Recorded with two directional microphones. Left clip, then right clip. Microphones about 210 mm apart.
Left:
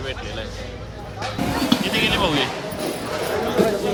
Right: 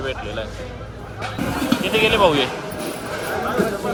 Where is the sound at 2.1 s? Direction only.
10° left (ahead or behind).